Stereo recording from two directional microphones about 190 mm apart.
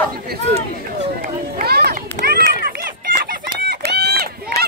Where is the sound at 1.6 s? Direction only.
55° right (ahead or behind).